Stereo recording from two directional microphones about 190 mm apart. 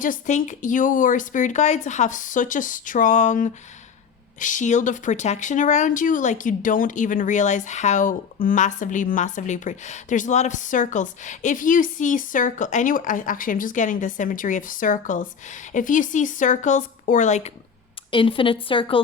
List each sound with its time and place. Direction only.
0.0 s speech: 40° left (ahead or behind)
18.1 s a woman's voice: 25° left (ahead or behind)